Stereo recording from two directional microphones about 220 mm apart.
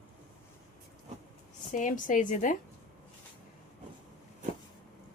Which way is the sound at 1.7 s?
35° left (ahead or behind).